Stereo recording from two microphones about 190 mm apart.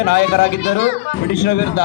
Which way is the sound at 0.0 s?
60° left (ahead or behind).